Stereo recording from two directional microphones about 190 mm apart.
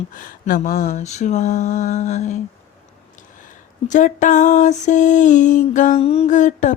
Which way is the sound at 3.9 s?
40° left (ahead or behind).